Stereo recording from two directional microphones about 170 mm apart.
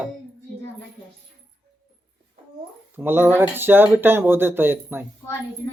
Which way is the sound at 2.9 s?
10° right (ahead or behind).